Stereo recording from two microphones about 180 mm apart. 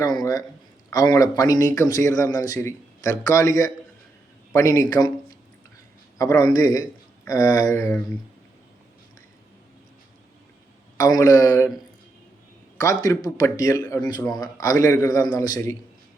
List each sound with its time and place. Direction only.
0.0 s speech: 20° left (ahead or behind)
6.4 s a sound: 15° left (ahead or behind)
10.9 s speech: 20° left (ahead or behind)
12.7 s speech: 20° left (ahead or behind)